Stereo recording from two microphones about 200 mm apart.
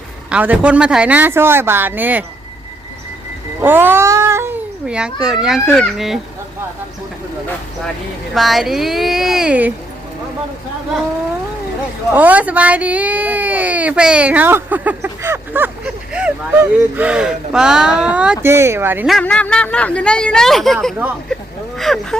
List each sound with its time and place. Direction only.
0.3 s speech: 5° right (ahead or behind)
3.6 s speech: 10° right (ahead or behind)
8.4 s speech: centre (ahead or behind)
12.1 s speech: 10° right (ahead or behind)
19.1 s speech: 5° left (ahead or behind)